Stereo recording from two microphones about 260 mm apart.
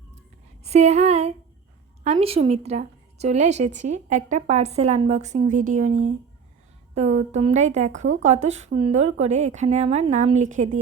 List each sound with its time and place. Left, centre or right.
0.6 s a woman's voice: right